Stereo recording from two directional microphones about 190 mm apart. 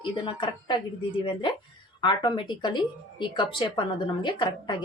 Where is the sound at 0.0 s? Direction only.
25° left (ahead or behind).